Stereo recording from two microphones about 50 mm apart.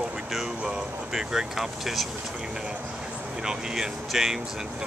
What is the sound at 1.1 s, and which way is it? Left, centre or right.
Speech, centre.